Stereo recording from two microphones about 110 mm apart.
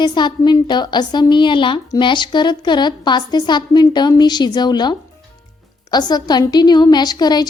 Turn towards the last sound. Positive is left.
turn(degrees=40)  # may be behind; listen again after turning